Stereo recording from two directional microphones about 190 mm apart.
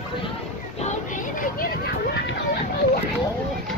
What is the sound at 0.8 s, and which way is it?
Vehicle, 45° left (ahead or behind).